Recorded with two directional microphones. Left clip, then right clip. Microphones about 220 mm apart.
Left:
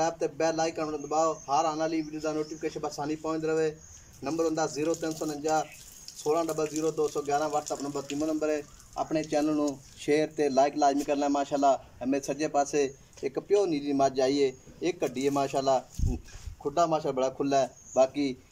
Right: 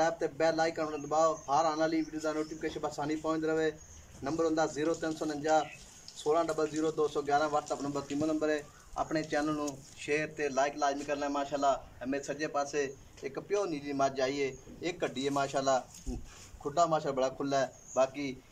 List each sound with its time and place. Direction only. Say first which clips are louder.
0.0 s a man's voice: left 2 dB; 10° left (ahead or behind)